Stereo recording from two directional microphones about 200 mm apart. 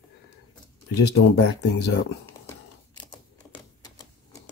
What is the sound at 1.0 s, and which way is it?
Speech, 60° left (ahead or behind).